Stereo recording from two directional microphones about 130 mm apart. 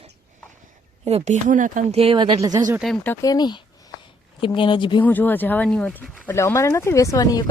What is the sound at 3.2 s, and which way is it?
Speech, 30° left (ahead or behind).